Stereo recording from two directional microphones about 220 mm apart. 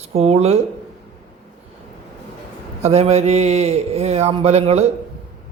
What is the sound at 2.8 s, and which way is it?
Speech, 30° right (ahead or behind).